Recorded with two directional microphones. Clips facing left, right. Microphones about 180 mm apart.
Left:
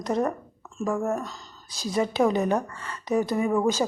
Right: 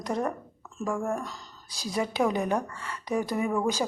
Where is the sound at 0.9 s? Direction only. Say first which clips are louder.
Left 3 dB; 5° left (ahead or behind).